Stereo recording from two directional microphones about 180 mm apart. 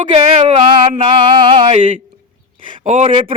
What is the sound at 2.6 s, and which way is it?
Speech, 45° right (ahead or behind).